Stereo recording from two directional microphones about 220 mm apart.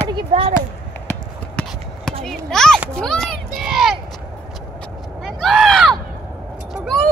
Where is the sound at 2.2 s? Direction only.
5° left (ahead or behind).